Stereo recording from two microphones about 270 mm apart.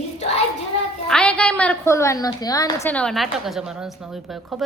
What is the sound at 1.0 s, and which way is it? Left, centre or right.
A woman's voice, centre.